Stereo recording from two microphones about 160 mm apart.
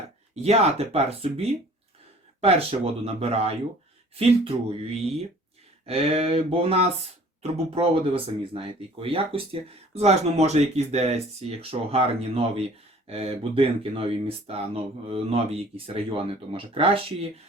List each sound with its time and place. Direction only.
0.4 s speech: 40° right (ahead or behind)